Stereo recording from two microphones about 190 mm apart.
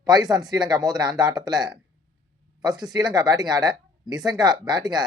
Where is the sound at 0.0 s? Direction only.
20° right (ahead or behind).